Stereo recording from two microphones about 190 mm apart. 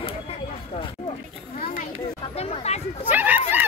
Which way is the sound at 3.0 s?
10° right (ahead or behind).